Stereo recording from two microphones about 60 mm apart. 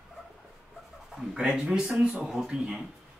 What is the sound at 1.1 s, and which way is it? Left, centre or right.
Speech, centre.